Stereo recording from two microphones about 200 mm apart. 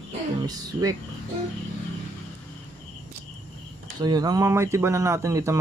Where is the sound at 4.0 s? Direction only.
20° right (ahead or behind).